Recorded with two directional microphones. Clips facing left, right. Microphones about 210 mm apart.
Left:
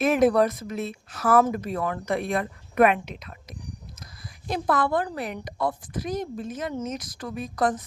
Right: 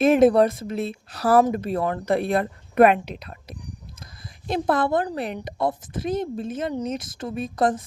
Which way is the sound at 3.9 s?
25° right (ahead or behind).